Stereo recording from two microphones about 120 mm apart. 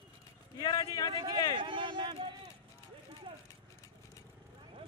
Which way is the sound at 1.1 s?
35° right (ahead or behind).